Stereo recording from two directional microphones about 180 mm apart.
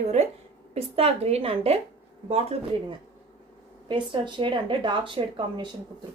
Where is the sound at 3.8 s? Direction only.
25° right (ahead or behind).